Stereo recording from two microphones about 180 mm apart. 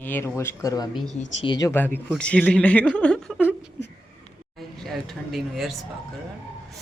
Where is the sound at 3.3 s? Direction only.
10° right (ahead or behind).